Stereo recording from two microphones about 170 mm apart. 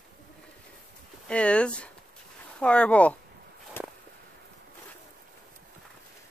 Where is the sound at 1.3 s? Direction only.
5° left (ahead or behind).